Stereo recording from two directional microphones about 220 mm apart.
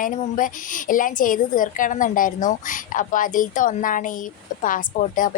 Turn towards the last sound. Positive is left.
turn(degrees=40)  # may be behind; listen again after turning